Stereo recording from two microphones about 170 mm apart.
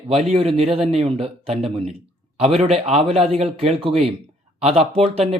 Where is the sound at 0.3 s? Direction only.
35° right (ahead or behind).